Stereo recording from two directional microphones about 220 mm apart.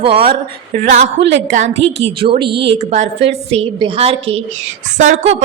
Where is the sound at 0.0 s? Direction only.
25° right (ahead or behind).